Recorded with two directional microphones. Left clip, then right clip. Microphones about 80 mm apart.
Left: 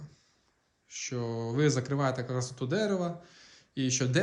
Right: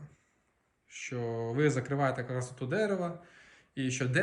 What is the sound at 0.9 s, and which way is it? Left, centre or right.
A man's voice, centre.